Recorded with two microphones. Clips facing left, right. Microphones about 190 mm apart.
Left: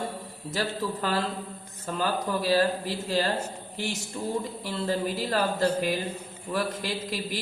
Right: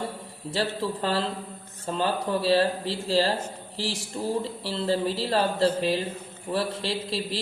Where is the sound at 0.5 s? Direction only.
30° right (ahead or behind).